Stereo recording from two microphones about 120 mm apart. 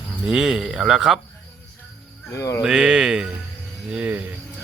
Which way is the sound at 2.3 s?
25° left (ahead or behind).